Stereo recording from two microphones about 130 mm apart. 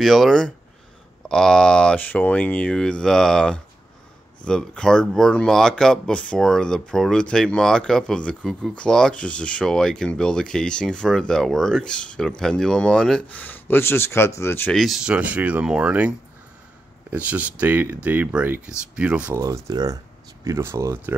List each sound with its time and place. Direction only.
0.0 s speech: centre (ahead or behind); by 14.7 s 20° left (ahead or behind)
14.7 s speech: centre (ahead or behind)
19.4 s speech: 30° right (ahead or behind)